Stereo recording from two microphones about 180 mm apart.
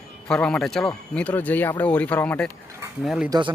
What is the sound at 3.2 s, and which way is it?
Speech, 25° right (ahead or behind).